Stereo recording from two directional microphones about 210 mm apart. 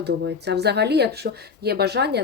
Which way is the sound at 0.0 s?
55° right (ahead or behind).